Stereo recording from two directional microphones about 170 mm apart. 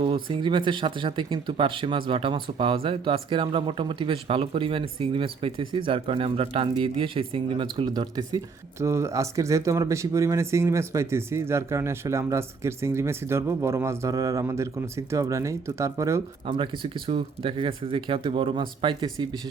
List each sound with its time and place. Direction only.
0.0 s speech: 30° right (ahead or behind)
16.5 s speech: 30° right (ahead or behind)